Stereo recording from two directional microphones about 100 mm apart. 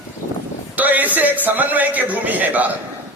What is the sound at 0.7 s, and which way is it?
A man's voice, 15° right (ahead or behind).